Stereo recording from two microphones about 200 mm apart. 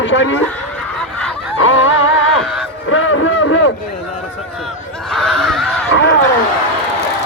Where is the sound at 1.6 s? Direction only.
75° left (ahead or behind).